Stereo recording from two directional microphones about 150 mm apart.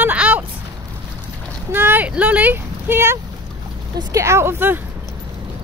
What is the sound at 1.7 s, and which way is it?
Speech, 15° right (ahead or behind).